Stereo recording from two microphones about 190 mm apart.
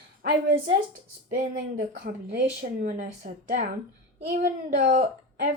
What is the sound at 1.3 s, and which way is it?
Speech, 50° right (ahead or behind).